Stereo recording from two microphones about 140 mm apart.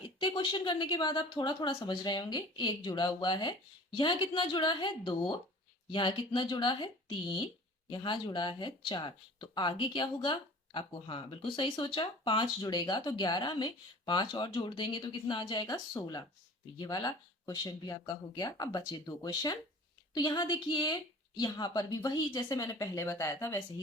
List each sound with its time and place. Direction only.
0.2 s a woman's voice: 35° left (ahead or behind); by 23.6 s 20° left (ahead or behind)